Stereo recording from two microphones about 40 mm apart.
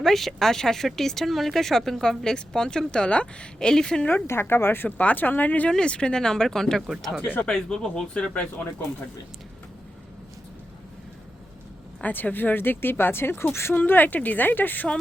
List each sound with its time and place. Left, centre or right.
0.0 s speech: centre; by 3.7 s left
3.7 s speech: centre
4.1 s speech: left
4.9 s speech: left
5.8 s speech: left
8.3 s speech: left
12.0 s speech: left
13.7 s speech: left